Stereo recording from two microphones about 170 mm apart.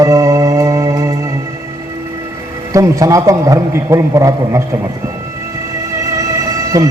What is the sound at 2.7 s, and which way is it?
A man's voice, 20° right (ahead or behind).